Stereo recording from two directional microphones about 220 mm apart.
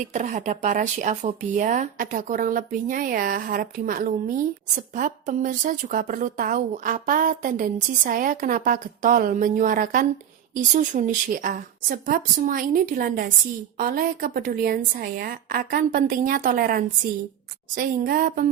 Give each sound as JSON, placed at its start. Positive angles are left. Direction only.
{"t": 0.0, "sound": "speech", "side_deg": -35}